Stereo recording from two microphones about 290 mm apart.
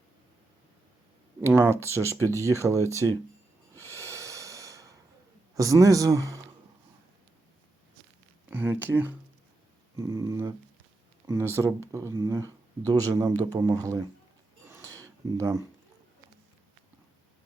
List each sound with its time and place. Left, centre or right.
1.4 s speech: centre
3.8 s snort: centre
5.5 s speech: centre
8.4 s speech: centre
14.7 s a sound: centre